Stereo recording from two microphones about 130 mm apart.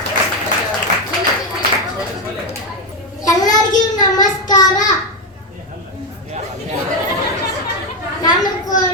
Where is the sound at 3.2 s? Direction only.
30° left (ahead or behind).